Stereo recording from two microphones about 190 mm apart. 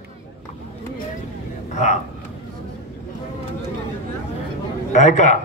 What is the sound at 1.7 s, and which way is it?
Vehicle, 40° left (ahead or behind).